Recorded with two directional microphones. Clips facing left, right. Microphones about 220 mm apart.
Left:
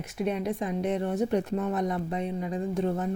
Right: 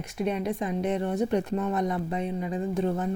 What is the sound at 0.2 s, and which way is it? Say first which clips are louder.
Speech: right 1 dB; centre (ahead or behind).